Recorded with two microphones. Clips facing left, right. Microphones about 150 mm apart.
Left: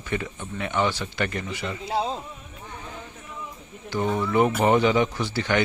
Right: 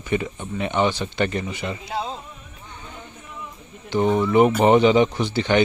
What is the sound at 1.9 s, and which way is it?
Speech, 30° left (ahead or behind).